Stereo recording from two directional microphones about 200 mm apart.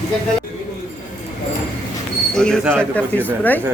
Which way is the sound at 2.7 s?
5° left (ahead or behind).